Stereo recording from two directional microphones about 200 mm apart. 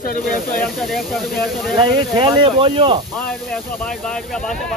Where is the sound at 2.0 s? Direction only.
20° right (ahead or behind).